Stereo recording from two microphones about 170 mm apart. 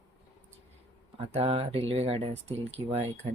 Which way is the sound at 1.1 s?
35° right (ahead or behind).